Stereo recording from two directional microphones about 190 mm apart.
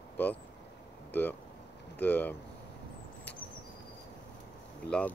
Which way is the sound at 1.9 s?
10° left (ahead or behind).